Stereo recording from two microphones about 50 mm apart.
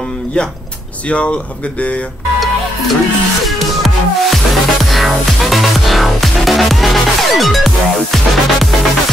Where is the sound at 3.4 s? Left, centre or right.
Centre.